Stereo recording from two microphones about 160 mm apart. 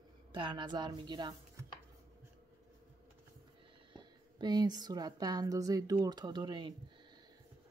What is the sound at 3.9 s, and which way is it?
A woman's voice, 25° right (ahead or behind).